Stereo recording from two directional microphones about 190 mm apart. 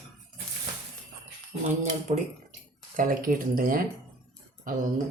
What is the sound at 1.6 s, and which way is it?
Speech, 40° right (ahead or behind).